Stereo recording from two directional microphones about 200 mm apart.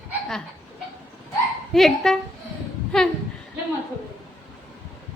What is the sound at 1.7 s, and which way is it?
Speech, centre (ahead or behind).